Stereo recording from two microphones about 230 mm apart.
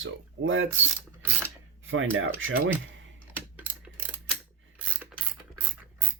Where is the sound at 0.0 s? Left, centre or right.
Right.